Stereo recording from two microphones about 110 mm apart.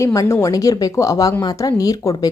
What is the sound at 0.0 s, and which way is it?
Speech, 30° left (ahead or behind).